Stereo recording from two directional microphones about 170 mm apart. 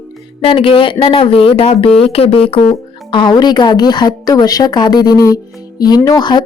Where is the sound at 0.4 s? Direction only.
30° left (ahead or behind).